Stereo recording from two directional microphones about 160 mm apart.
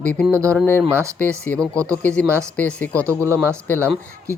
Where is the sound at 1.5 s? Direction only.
15° left (ahead or behind).